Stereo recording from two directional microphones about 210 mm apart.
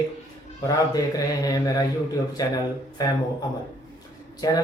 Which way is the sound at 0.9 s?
15° left (ahead or behind).